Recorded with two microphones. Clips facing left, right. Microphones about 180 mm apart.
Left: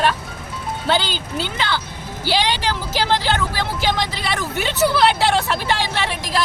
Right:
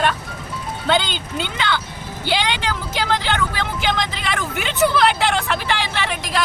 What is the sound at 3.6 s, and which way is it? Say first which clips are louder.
Speech: left 1 dB; 35° left (ahead or behind).